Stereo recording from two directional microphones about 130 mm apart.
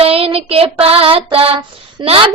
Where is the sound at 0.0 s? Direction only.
45° right (ahead or behind).